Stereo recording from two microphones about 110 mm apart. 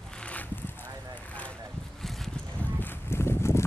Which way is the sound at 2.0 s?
Centre (ahead or behind).